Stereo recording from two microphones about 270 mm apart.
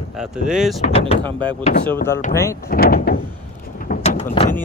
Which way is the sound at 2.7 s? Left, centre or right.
Left.